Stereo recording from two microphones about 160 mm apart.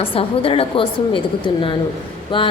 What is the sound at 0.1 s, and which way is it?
A woman's voice, 35° left (ahead or behind).